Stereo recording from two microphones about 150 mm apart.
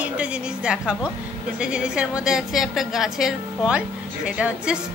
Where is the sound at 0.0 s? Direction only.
5° right (ahead or behind).